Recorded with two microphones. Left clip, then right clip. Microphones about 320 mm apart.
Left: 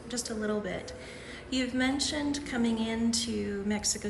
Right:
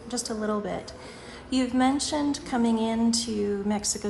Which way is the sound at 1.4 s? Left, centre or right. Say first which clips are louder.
Right 6 dB; centre.